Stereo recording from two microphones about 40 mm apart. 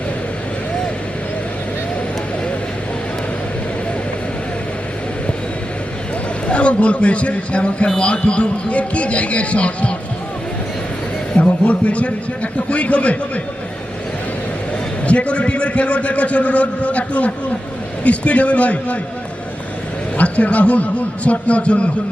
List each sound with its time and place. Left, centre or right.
6.5 s a man's voice: left
11.3 s a man's voice: left
15.0 s a man's voice: left
20.1 s a man's voice: left